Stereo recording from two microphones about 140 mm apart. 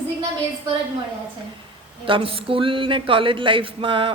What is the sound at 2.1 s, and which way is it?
Speech, 40° right (ahead or behind).